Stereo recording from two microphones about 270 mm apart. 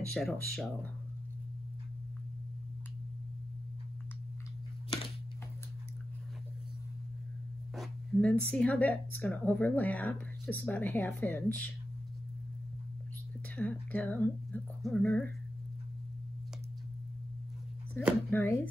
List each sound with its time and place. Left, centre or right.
0.1 s speech: centre
7.7 s speech: centre
13.6 s speech: centre
18.3 s speech: centre